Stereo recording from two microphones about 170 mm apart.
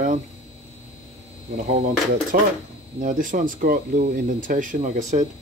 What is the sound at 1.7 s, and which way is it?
Speech, 50° right (ahead or behind).